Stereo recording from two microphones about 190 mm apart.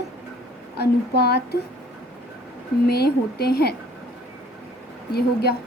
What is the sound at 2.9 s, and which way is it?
Speech, 55° left (ahead or behind).